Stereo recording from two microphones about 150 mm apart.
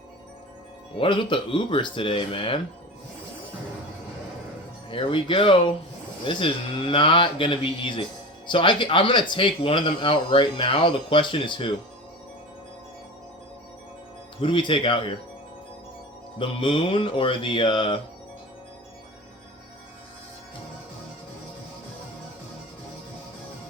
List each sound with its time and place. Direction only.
0.9 s speech: 35° left (ahead or behind)
4.9 s speech: 35° left (ahead or behind)
14.3 s speech: 35° left (ahead or behind)
16.4 s speech: 35° left (ahead or behind)